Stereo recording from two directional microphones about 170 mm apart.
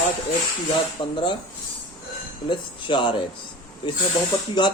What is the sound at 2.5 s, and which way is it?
Speech, 30° left (ahead or behind).